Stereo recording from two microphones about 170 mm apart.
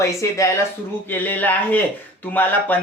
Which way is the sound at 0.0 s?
20° left (ahead or behind).